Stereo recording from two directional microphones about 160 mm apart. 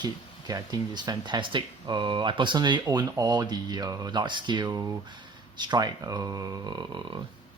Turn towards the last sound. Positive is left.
turn(degrees=-25)  # may be behind; listen again after turning